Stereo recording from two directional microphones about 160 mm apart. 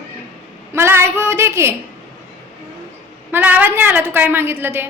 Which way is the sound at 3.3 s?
10° right (ahead or behind).